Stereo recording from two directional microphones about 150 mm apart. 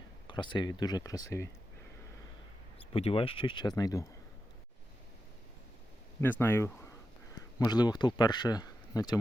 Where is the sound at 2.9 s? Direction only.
40° left (ahead or behind).